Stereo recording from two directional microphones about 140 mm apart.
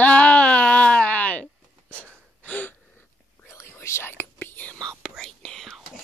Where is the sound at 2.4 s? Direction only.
10° left (ahead or behind).